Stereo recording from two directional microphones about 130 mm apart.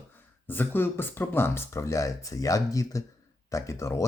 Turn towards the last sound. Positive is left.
turn(degrees=25)  # may be behind; listen again after turning